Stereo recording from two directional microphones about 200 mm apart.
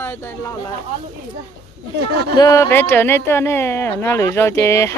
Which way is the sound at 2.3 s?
15° left (ahead or behind).